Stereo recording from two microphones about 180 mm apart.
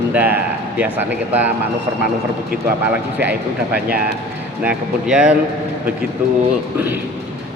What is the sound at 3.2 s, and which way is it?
Speech, 10° right (ahead or behind).